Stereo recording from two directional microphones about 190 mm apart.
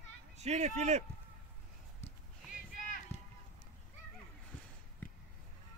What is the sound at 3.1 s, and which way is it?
Run, 35° left (ahead or behind).